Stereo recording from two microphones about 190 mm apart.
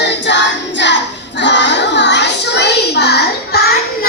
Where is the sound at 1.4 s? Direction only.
70° left (ahead or behind).